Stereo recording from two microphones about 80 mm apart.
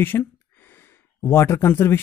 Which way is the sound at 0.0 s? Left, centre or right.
Left.